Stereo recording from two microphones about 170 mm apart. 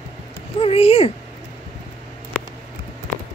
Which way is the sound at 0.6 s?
35° left (ahead or behind).